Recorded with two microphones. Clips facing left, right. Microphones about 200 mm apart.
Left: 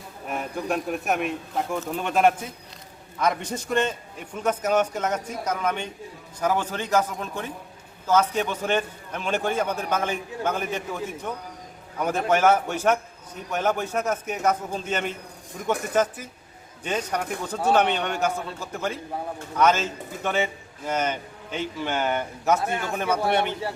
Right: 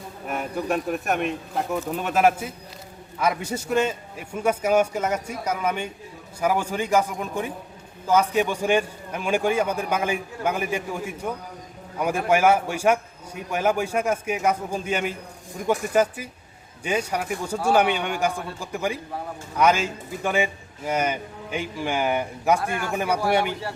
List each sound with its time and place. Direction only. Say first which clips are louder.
0.3 s a man's voice: right 2 dB; centre (ahead or behind)
22.6 s a man's voice: even; 20° left (ahead or behind)
23.0 s a man's voice: right 1 dB; 10° right (ahead or behind)